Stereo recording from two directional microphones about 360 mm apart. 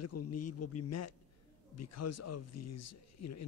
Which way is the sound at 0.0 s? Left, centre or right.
Left.